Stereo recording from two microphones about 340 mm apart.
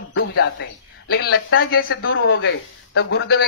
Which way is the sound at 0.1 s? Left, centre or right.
Left.